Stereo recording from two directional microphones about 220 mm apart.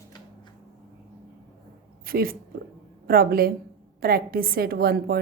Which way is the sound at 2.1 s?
40° right (ahead or behind).